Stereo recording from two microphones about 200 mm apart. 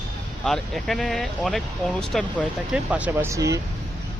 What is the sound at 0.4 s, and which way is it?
Speech, centre (ahead or behind).